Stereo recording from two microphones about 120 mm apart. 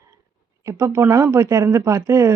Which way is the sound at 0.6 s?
25° right (ahead or behind).